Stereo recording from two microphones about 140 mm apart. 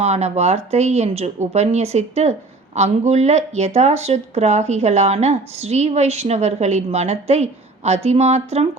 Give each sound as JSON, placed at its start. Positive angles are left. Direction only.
{"t": 0.0, "sound": "speech", "side_deg": -50}